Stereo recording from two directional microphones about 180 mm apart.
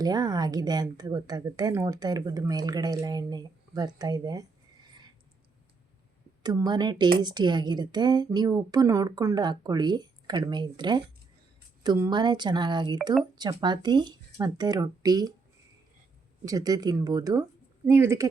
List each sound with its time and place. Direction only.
0.0 s a woman's voice: 20° right (ahead or behind)
4.9 s a sound: 25° right (ahead or behind)
6.4 s a woman's voice: 20° right (ahead or behind)
16.5 s a woman's voice: 20° right (ahead or behind)